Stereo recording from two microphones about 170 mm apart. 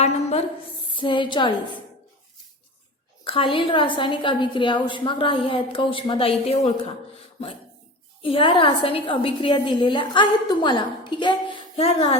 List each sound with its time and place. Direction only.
0.0 s a sound: 40° left (ahead or behind)
0.9 s a woman's voice: 30° left (ahead or behind)
3.2 s a woman's voice: 30° left (ahead or behind)
8.2 s a woman's voice: 30° left (ahead or behind)